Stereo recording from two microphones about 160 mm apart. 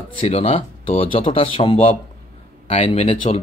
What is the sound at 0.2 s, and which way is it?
Speech, 40° left (ahead or behind).